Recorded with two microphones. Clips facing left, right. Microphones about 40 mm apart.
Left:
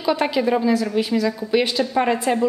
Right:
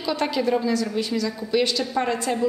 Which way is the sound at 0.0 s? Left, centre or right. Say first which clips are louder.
Left 4 dB; centre.